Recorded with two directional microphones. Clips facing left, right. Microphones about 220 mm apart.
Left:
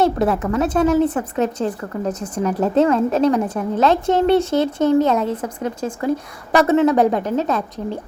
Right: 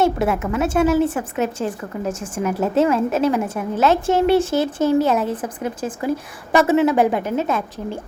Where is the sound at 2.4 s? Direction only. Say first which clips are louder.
Left 2 dB; 5° right (ahead or behind).